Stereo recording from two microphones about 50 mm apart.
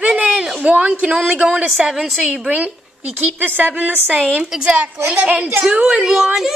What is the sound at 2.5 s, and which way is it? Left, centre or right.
Speech, right.